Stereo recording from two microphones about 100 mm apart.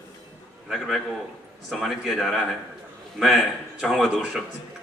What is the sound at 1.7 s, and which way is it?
A man's voice, centre (ahead or behind).